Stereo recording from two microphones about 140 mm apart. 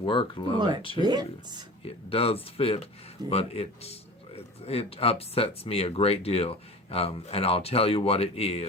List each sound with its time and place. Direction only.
0.0 s speech: 35° left (ahead or behind)
1.0 s speech: 30° right (ahead or behind)
2.0 s speech: 45° left (ahead or behind)